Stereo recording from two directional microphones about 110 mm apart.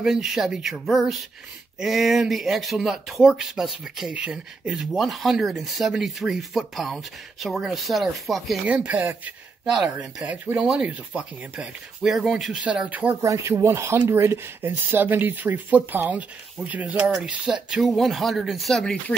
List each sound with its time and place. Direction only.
0.0 s speech: 5° right (ahead or behind)
8.6 s speech: 10° right (ahead or behind)
13.2 s speech: 30° right (ahead or behind); by 19.1 s 5° left (ahead or behind)